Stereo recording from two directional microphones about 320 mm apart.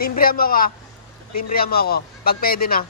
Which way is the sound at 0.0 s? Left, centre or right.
Left.